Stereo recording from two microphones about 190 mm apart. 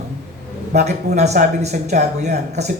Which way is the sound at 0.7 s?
35° right (ahead or behind).